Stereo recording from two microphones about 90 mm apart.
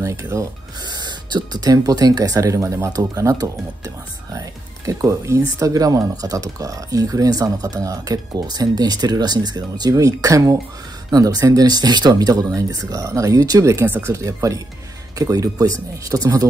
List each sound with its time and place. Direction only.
0.0 s speech: 35° right (ahead or behind)
0.8 s speech: 55° right (ahead or behind); by 13.8 s 35° right (ahead or behind)
13.8 s speech: 20° right (ahead or behind)
14.1 s speech: 35° right (ahead or behind)